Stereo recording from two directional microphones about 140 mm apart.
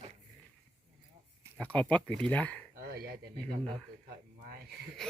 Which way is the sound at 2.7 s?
90° right.